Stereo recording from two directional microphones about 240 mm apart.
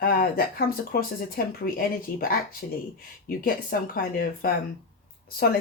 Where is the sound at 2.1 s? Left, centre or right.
Left.